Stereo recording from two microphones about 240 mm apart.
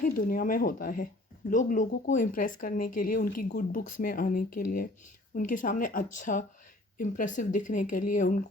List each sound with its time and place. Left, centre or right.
0.0 s speech: left